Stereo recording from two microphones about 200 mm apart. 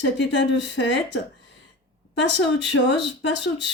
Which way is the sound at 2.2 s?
60° left (ahead or behind).